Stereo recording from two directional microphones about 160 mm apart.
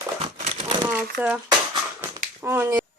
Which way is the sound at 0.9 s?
10° right (ahead or behind).